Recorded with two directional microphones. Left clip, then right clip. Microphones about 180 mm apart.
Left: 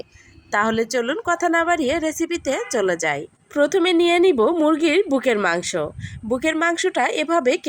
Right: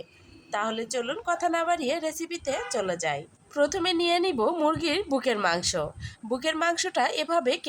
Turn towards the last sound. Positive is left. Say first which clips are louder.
# left 6 dB
turn(degrees=20)  # may be behind; listen again after turning